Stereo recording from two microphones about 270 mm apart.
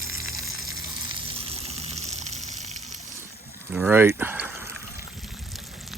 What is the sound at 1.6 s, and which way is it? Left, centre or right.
Water, right.